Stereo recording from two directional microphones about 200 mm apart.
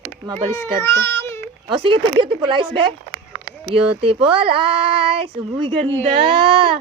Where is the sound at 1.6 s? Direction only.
25° right (ahead or behind).